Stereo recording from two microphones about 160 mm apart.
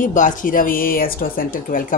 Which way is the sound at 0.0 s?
55° left (ahead or behind).